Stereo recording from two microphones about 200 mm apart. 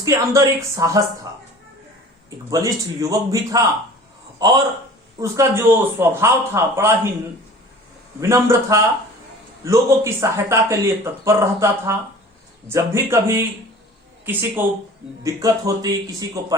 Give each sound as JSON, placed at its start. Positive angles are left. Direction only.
{"t": 0.0, "sound": "speech", "side_deg": -15}
{"t": 2.5, "sound": "a man's voice", "side_deg": -15}
{"t": 8.2, "sound": "speech", "side_deg": -15}
{"t": 14.6, "sound": "speech", "side_deg": -10}